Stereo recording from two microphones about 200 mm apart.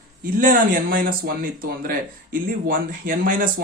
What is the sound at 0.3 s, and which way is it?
A man's voice, 45° right (ahead or behind).